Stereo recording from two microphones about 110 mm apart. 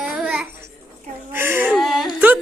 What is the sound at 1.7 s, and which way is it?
Speech, centre (ahead or behind).